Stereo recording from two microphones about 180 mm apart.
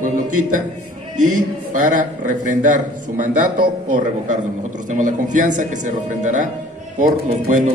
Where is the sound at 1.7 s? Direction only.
45° right (ahead or behind).